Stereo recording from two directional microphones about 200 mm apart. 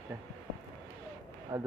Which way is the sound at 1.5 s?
20° right (ahead or behind).